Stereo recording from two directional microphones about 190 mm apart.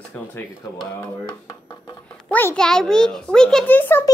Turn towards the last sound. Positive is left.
turn(degrees=10)  # may be behind; listen again after turning